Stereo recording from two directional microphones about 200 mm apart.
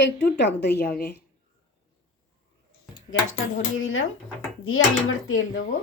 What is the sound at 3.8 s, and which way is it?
Dishes, 90° left.